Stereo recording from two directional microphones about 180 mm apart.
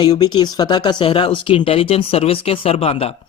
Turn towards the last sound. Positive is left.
turn(degrees=35)  # may be behind; listen again after turning